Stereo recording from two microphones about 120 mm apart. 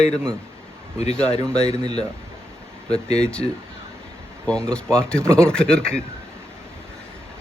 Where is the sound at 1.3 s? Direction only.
25° right (ahead or behind).